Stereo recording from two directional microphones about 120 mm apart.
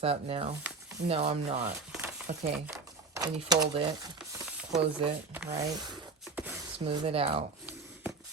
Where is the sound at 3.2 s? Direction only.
35° right (ahead or behind).